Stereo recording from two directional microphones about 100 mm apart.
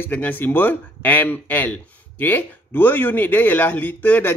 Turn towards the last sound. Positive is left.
turn(degrees=15)  # may be behind; listen again after turning